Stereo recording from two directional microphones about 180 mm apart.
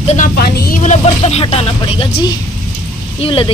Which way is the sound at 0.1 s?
50° left (ahead or behind).